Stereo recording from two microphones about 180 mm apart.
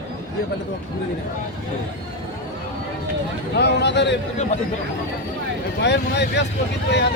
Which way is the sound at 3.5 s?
70° left (ahead or behind).